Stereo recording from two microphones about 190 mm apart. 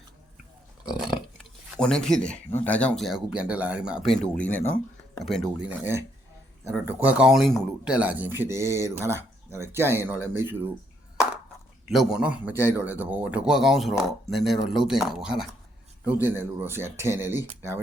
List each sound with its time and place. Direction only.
0.9 s a man's voice: centre (ahead or behind)
11.9 s a man's voice: centre (ahead or behind)